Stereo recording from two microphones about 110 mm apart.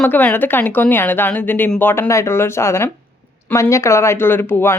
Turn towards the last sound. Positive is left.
turn(degrees=20)  # may be behind; listen again after turning